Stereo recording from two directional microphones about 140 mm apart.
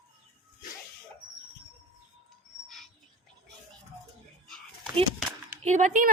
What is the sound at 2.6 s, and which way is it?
Bird, centre (ahead or behind).